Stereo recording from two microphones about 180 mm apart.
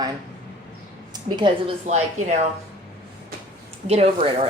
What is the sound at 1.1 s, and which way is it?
Speech, 25° right (ahead or behind).